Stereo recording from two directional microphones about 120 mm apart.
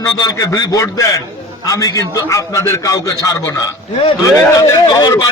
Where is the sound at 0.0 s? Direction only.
30° left (ahead or behind).